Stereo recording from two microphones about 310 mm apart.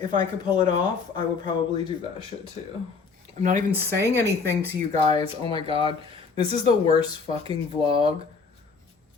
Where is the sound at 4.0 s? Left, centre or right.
Centre.